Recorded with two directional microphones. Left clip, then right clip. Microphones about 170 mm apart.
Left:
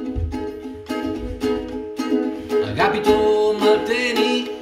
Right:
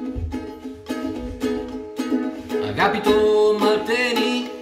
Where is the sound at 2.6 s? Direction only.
25° right (ahead or behind).